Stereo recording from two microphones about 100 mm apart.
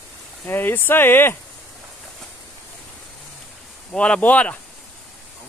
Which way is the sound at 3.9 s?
10° left (ahead or behind).